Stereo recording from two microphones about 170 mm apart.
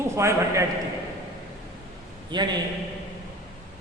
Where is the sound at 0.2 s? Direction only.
15° right (ahead or behind).